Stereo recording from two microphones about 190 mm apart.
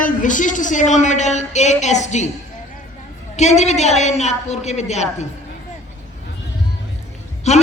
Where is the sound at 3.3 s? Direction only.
35° left (ahead or behind).